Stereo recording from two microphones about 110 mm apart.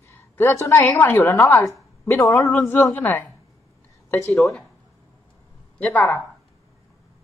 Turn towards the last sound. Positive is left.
turn(degrees=15)  # may be behind; listen again after turning